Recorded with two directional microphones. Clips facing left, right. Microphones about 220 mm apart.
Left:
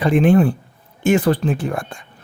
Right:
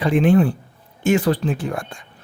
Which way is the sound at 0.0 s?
50° left (ahead or behind).